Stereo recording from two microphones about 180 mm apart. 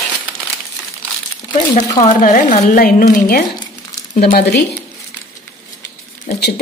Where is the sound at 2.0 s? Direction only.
45° left (ahead or behind).